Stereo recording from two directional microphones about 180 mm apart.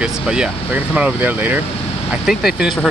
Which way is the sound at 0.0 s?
5° right (ahead or behind).